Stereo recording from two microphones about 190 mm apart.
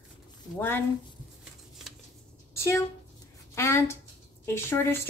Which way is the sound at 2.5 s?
15° left (ahead or behind).